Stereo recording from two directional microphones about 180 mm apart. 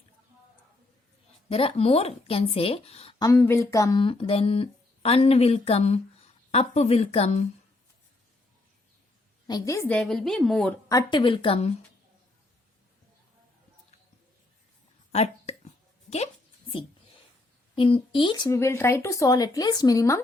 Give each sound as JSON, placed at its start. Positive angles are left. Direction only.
{"t": 1.5, "sound": "speech", "side_deg": 35}
{"t": 3.2, "sound": "speech", "side_deg": 15}
{"t": 4.0, "sound": "speech", "side_deg": 30}
{"t": 9.5, "sound": "speech", "side_deg": 20}
{"t": 9.9, "sound": "a woman's voice", "side_deg": 5}
{"t": 10.8, "sound": "speech", "side_deg": 25}
{"t": 15.1, "sound": "a sound", "side_deg": 35}
{"t": 17.7, "sound": "speech", "side_deg": 30}